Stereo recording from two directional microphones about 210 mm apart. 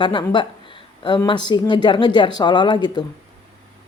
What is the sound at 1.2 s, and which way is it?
Speech, 20° left (ahead or behind).